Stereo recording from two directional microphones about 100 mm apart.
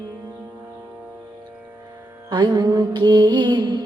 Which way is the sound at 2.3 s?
45° right (ahead or behind).